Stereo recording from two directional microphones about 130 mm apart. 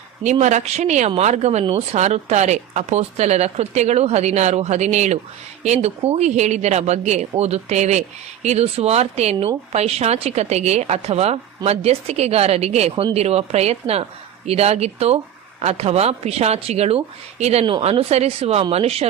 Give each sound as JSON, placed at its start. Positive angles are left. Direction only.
{"t": 0.2, "sound": "a woman's voice", "side_deg": -65}
{"t": 17.6, "sound": "a woman's voice", "side_deg": -40}